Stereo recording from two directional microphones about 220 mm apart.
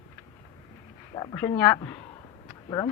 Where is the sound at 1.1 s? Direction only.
20° left (ahead or behind).